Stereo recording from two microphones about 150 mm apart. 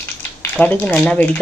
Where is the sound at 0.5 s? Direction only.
10° left (ahead or behind).